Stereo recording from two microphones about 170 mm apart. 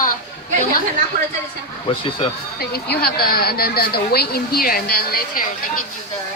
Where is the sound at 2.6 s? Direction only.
65° left (ahead or behind).